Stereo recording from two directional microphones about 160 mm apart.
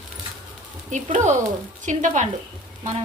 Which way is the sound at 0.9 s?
50° right (ahead or behind).